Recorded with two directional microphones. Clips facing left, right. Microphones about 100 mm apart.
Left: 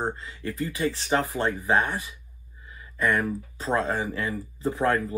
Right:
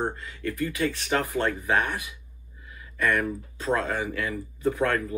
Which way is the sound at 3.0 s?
20° left (ahead or behind).